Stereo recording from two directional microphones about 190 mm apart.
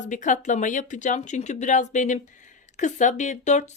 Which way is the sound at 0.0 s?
40° left (ahead or behind).